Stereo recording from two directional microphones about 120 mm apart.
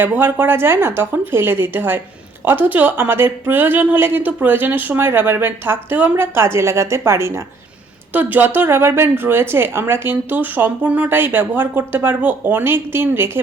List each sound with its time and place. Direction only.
0.0 s a woman's voice: 15° right (ahead or behind)